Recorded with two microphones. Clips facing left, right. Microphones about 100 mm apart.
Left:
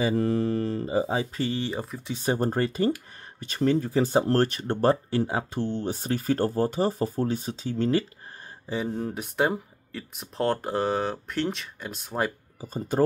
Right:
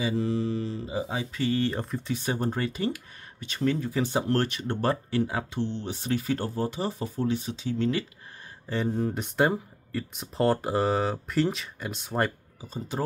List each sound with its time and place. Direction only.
0.0 s mantra: 50° left (ahead or behind); by 1.5 s 35° left (ahead or behind)
1.5 s speech: 15° left (ahead or behind)
2.1 s speech: 40° left (ahead or behind)
5.6 s speech: 45° left (ahead or behind)
8.8 s speech: centre (ahead or behind)
12.5 s mantra: 45° left (ahead or behind)